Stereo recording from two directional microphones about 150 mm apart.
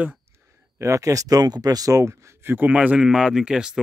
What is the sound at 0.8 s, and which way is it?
Speech, 20° right (ahead or behind).